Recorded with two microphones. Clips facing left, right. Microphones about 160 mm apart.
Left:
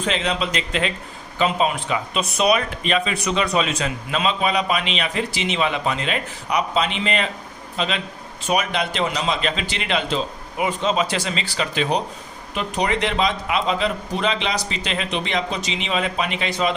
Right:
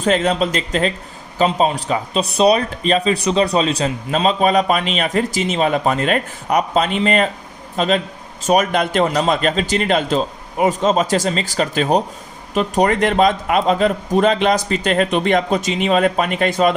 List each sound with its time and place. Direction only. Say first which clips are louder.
0.0 s a man's voice: right 7 dB; 45° right (ahead or behind)